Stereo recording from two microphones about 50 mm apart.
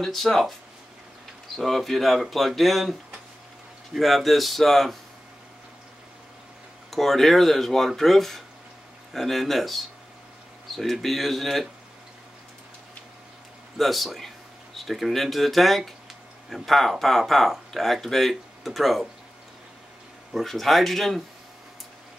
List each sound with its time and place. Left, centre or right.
0.0 s speech: centre
1.6 s speech: centre
6.9 s speech: centre
13.7 s speech: centre
20.3 s speech: centre